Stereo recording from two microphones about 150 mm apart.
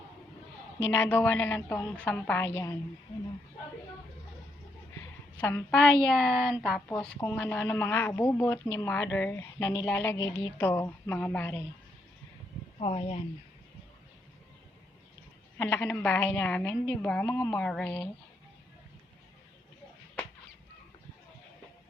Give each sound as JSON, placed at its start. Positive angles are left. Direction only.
{"t": 0.8, "sound": "a woman's voice", "side_deg": 15}
{"t": 5.4, "sound": "a woman's voice", "side_deg": 15}
{"t": 12.8, "sound": "speech", "side_deg": 40}
{"t": 15.5, "sound": "a woman's voice", "side_deg": 15}